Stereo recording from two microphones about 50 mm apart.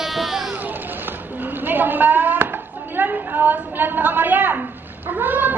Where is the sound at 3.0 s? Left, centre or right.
Right.